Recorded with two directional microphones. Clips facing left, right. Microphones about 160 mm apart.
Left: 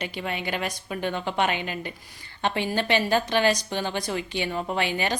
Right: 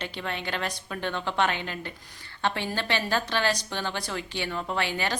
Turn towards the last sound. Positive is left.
turn(degrees=15)  # may be behind; listen again after turning